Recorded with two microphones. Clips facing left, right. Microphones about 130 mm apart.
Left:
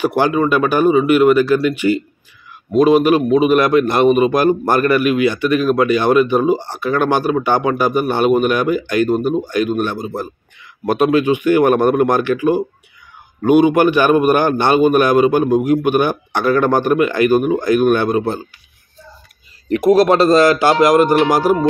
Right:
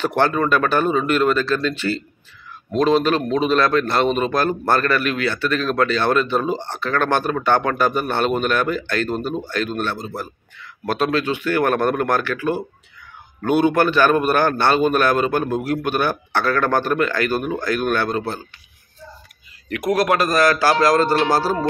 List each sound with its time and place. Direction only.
0.0 s a man's voice: 10° left (ahead or behind)
19.7 s a man's voice: 25° left (ahead or behind)